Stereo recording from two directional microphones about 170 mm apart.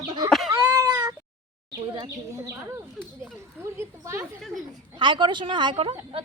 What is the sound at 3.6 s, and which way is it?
Speech, 15° right (ahead or behind).